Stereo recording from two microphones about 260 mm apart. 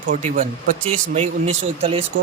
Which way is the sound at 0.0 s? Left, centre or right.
Right.